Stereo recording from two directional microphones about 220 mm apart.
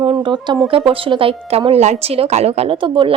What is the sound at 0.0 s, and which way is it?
Speech, 20° right (ahead or behind).